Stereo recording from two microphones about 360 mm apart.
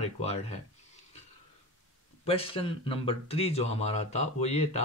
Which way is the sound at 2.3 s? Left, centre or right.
Centre.